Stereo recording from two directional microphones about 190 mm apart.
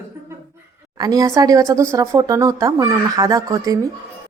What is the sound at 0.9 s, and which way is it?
Speech, 20° right (ahead or behind).